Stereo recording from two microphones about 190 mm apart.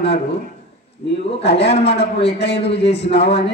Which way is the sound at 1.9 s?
60° left (ahead or behind).